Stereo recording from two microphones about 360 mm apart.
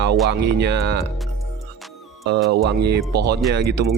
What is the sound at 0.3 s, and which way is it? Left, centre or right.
Speech, right.